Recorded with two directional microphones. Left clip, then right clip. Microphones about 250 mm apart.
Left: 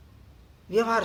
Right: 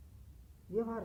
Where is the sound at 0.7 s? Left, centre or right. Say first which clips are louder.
Left 13 dB; centre.